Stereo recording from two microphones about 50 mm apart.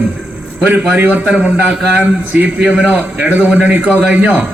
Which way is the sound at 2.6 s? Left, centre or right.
Centre.